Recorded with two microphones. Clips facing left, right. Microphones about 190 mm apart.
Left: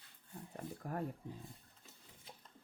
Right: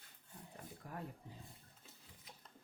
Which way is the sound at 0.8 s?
50° left (ahead or behind).